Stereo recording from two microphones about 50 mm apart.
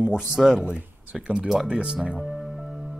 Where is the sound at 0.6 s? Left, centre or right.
Right.